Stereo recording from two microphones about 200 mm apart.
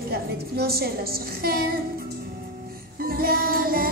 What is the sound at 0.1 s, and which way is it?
A woman's voice, 50° right (ahead or behind).